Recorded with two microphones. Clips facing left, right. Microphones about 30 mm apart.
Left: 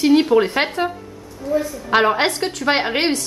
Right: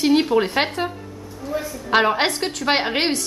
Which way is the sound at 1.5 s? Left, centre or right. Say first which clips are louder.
Left 6 dB; centre.